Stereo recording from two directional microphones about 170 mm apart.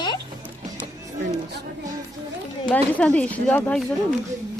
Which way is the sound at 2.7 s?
5° left (ahead or behind).